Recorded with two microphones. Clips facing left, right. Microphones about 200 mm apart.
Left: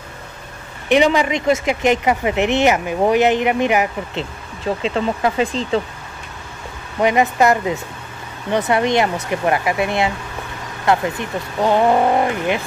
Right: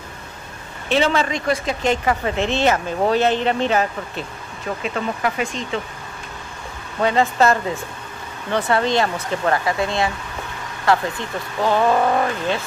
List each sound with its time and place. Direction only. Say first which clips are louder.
0.8 s speech: left 4 dB; 15° left (ahead or behind); by 5.8 s 35° left (ahead or behind)
7.0 s speech: left 2 dB; 15° left (ahead or behind)